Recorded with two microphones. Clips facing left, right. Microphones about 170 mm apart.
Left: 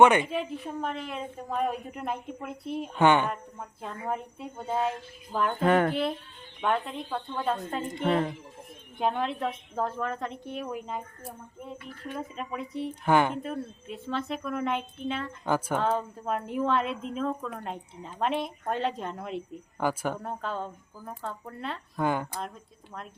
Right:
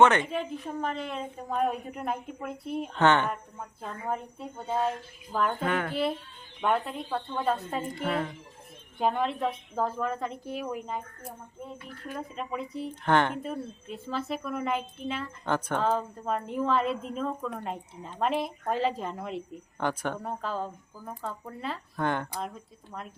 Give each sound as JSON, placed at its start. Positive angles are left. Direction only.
{"t": 0.0, "sound": "a woman's voice", "side_deg": 10}
{"t": 2.9, "sound": "a woman's voice", "side_deg": 10}
{"t": 3.2, "sound": "a woman's voice", "side_deg": 0}
{"t": 5.6, "sound": "a woman's voice", "side_deg": 40}
{"t": 5.9, "sound": "a woman's voice", "side_deg": 0}
{"t": 7.9, "sound": "a woman's voice", "side_deg": 30}
{"t": 9.0, "sound": "a woman's voice", "side_deg": 0}
{"t": 12.1, "sound": "a woman's voice", "side_deg": 0}